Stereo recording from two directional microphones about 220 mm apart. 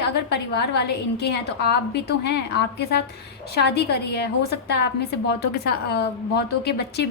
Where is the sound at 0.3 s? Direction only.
50° left (ahead or behind).